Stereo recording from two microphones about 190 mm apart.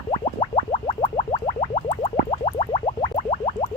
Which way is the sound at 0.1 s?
30° left (ahead or behind).